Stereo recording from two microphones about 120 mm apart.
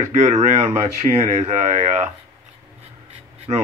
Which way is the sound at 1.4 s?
75° right (ahead or behind).